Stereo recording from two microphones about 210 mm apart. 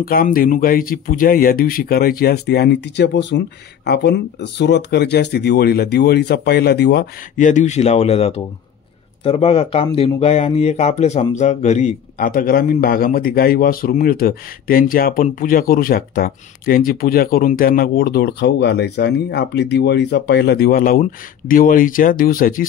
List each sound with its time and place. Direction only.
0.0 s speech: 45° left (ahead or behind)
7.3 s speech: 35° left (ahead or behind)